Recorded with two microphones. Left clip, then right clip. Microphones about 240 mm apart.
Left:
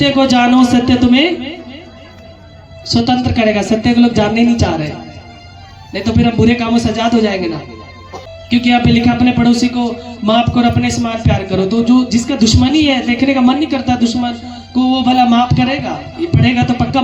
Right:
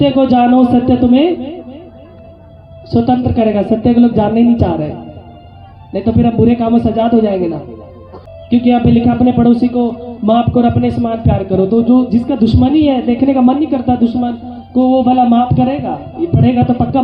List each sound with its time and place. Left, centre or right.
0.0 s speech: left
2.9 s speech: left
5.9 s speech: left
8.4 s speech: left
14.7 s music: left
14.9 s speech: left